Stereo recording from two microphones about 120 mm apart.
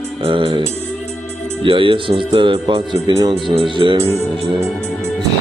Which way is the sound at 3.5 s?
45° right (ahead or behind).